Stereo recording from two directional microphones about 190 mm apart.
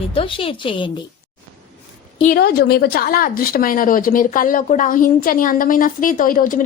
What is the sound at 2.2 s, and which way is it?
A woman's voice, 50° left (ahead or behind).